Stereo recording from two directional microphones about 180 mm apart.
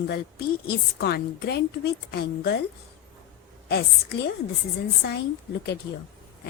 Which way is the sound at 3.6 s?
60° left (ahead or behind).